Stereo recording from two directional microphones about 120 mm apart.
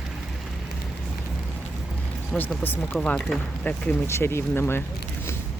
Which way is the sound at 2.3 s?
10° left (ahead or behind).